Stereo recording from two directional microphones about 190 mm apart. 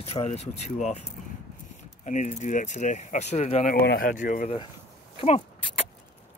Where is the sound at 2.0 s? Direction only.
40° left (ahead or behind).